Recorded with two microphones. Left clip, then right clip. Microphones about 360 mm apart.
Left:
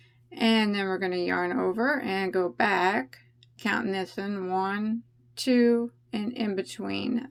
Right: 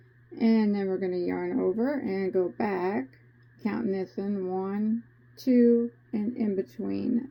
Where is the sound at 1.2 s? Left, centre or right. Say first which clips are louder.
Left 2 dB; left.